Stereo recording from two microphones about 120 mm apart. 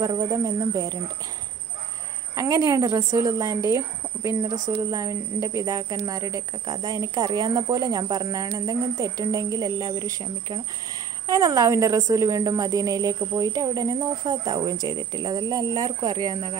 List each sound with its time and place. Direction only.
0.0 s a woman's voice: 35° right (ahead or behind)
2.3 s a woman's voice: 30° right (ahead or behind)
11.2 s a woman's voice: 30° right (ahead or behind)